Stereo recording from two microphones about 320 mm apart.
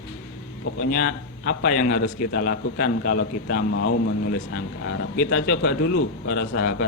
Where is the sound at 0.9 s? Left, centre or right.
Left.